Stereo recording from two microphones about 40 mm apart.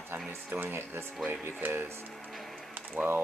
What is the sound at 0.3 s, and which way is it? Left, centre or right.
Speech, right.